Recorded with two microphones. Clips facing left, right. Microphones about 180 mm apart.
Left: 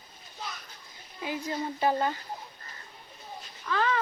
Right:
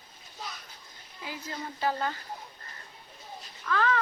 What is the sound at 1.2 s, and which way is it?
Speech, 20° left (ahead or behind).